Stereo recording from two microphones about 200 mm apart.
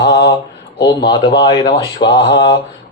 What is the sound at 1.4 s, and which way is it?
Speech, 20° left (ahead or behind).